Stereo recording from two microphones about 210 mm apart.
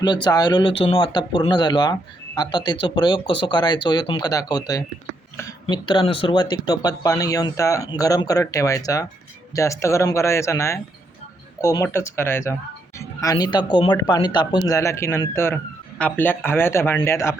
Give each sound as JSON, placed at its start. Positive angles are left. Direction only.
{"t": 0.0, "sound": "speech", "side_deg": 20}